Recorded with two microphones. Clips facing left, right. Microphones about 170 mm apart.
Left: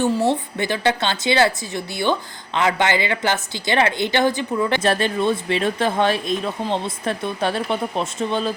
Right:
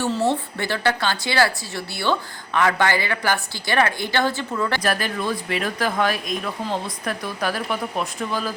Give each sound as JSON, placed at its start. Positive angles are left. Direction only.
{"t": 0.0, "sound": "a woman's voice", "side_deg": 15}